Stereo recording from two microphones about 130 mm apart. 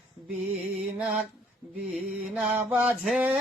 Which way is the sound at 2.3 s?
10° right (ahead or behind).